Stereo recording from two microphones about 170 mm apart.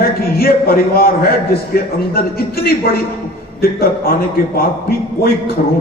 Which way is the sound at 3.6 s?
60° left (ahead or behind).